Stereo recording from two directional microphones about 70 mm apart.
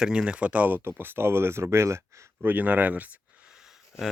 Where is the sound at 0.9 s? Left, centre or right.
Right.